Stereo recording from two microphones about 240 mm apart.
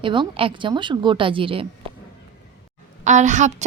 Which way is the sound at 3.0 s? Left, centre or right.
Right.